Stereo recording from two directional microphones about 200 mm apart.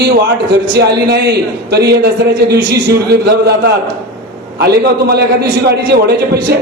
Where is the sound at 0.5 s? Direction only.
55° right (ahead or behind).